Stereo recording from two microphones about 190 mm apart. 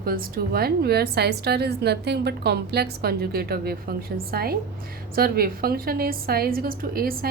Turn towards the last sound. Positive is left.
turn(degrees=-50)  # may be behind; listen again after turning